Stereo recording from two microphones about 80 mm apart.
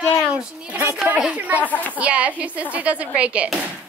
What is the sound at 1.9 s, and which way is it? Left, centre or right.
A woman's voice, centre.